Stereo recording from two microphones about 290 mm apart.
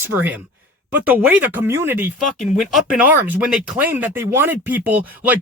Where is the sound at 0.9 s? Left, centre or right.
Centre.